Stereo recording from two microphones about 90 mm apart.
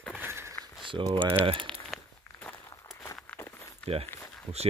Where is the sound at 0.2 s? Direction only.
30° right (ahead or behind).